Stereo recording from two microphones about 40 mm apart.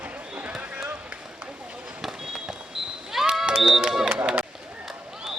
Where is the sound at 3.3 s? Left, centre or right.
Centre.